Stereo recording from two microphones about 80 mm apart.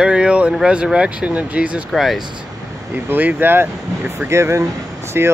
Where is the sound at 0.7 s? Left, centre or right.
Centre.